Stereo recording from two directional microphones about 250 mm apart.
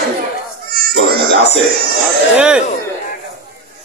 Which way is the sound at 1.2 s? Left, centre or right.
Left.